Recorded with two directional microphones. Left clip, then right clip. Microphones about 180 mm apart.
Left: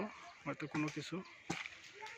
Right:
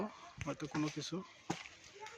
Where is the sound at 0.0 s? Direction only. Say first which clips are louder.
Right 1 dB; centre (ahead or behind).